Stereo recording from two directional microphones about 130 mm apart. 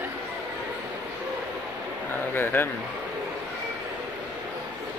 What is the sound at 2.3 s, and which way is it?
Speech, 15° left (ahead or behind).